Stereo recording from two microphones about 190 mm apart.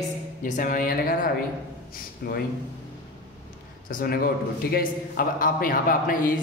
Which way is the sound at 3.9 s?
50° left (ahead or behind).